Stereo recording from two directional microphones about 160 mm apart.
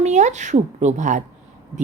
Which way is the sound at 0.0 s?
45° right (ahead or behind).